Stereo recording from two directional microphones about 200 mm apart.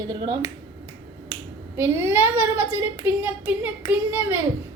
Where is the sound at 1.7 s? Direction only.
15° right (ahead or behind).